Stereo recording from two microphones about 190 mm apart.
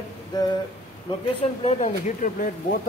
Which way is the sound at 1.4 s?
35° left (ahead or behind).